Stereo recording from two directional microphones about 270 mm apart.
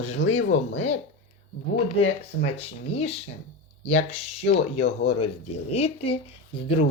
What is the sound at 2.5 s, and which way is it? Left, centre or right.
Speech, left.